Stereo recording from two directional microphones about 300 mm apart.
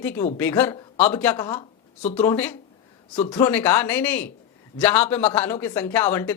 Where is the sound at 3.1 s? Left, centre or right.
Centre.